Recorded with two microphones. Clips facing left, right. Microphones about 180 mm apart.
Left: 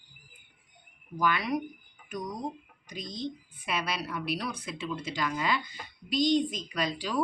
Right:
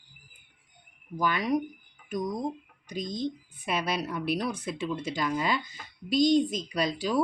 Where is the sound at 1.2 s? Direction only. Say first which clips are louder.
Right 2 dB; 40° right (ahead or behind).